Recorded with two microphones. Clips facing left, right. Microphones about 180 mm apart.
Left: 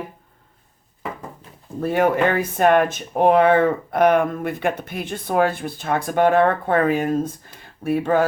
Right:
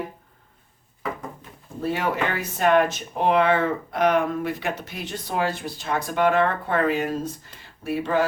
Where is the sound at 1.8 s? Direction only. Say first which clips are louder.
Left 7 dB; 55° left (ahead or behind).